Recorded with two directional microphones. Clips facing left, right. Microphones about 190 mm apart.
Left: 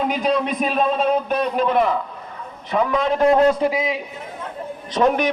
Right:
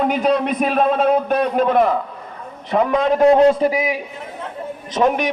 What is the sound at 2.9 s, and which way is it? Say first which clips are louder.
Speech: right 4 dB; 20° right (ahead or behind).